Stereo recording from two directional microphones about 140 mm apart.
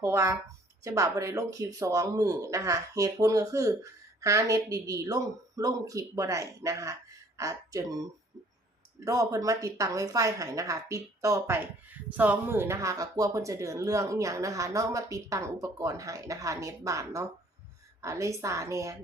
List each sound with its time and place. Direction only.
0.0 s a man's voice: 20° right (ahead or behind)
9.0 s a man's voice: 25° right (ahead or behind)